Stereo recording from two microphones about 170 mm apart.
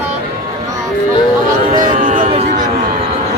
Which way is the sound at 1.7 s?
55° right (ahead or behind).